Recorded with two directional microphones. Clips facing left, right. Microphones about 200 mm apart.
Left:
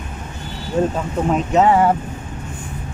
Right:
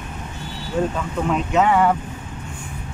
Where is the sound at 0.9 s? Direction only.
40° left (ahead or behind).